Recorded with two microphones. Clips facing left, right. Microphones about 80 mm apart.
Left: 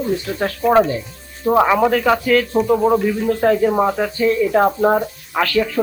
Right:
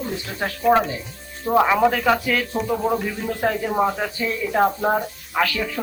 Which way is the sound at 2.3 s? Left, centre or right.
Centre.